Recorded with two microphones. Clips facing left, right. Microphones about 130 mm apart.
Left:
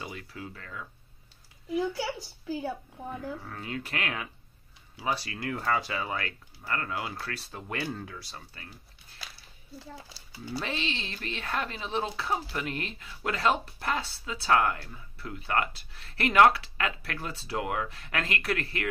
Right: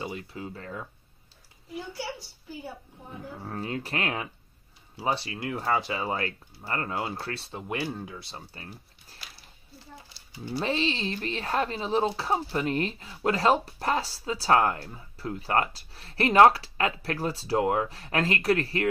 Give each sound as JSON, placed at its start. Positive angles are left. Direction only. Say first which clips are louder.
{"t": 0.0, "sound": "speech", "louder": "right 4 dB", "side_deg": -25}
{"t": 2.4, "sound": "a woman's voice", "louder": "left 7 dB", "side_deg": 90}
{"t": 3.3, "sound": "speech", "louder": "right 4 dB", "side_deg": -35}
{"t": 7.6, "sound": "speech", "louder": "right 2 dB", "side_deg": -15}
{"t": 10.6, "sound": "speech", "louder": "right 8 dB", "side_deg": -35}